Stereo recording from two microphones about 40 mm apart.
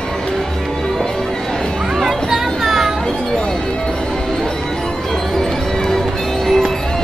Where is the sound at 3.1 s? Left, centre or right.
Left.